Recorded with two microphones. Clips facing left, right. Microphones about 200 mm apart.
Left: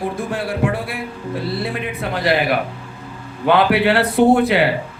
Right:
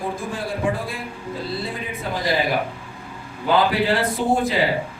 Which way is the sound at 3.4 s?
70° left (ahead or behind).